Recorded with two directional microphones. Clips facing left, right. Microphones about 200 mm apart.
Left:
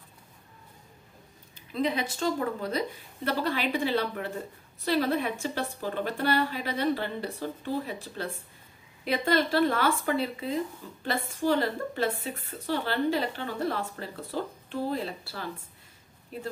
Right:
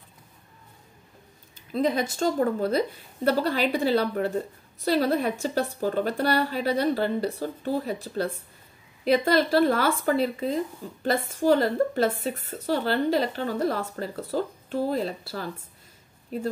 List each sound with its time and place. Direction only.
1.7 s speech: 40° right (ahead or behind)